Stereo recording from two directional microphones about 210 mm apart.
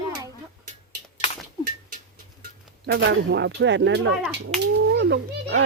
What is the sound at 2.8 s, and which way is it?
Speech, 55° right (ahead or behind).